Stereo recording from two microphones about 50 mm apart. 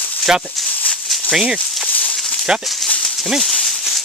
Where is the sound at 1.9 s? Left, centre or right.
Left.